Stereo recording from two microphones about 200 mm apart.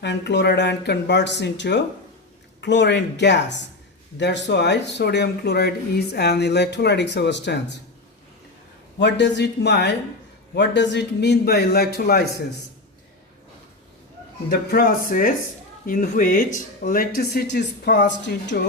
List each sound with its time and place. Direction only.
0.0 s speech: 60° left (ahead or behind)
9.0 s speech: 60° left (ahead or behind)
14.5 s speech: 50° left (ahead or behind)